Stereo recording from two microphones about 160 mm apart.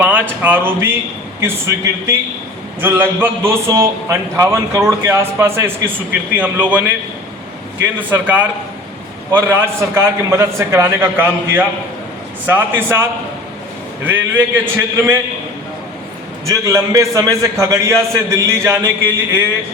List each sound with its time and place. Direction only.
0.0 s a man's voice: 10° right (ahead or behind)
7.9 s a man's voice: 10° right (ahead or behind)
16.5 s a man's voice: 20° right (ahead or behind)